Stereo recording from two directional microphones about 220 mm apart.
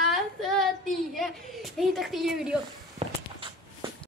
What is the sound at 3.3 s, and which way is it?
Walk, 20° right (ahead or behind).